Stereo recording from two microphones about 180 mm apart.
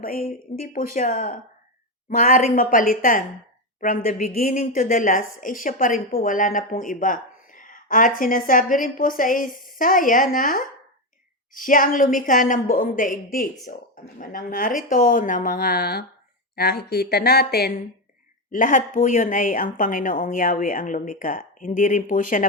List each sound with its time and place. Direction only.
0.0 s a woman's voice: 55° left (ahead or behind)
18.5 s speech: 45° left (ahead or behind)